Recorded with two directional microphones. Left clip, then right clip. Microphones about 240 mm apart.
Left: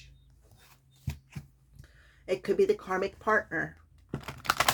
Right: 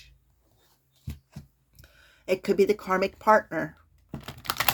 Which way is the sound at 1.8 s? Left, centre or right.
Right.